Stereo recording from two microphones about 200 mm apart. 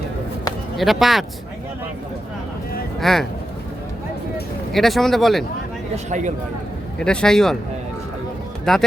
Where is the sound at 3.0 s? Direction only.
Centre (ahead or behind).